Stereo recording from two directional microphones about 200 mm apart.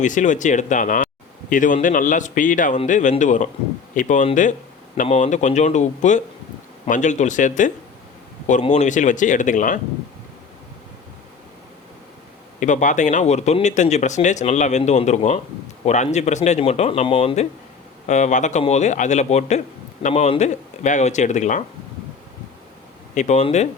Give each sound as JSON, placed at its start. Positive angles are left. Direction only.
{"t": 0.0, "sound": "a man's voice", "side_deg": 40}
{"t": 12.5, "sound": "a man's voice", "side_deg": 40}
{"t": 23.1, "sound": "a man's voice", "side_deg": 35}